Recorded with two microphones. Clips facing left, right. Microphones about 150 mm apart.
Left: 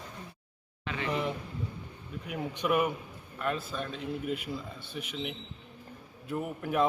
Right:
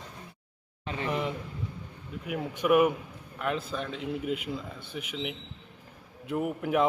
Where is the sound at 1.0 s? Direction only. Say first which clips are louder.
Right 1 dB; 15° right (ahead or behind).